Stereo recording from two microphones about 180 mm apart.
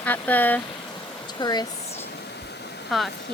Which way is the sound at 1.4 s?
20° left (ahead or behind).